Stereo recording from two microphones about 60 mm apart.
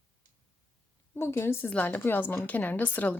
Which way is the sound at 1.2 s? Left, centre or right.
Left.